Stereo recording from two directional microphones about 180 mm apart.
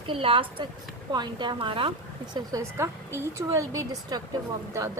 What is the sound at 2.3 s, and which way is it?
A woman's voice, 20° right (ahead or behind).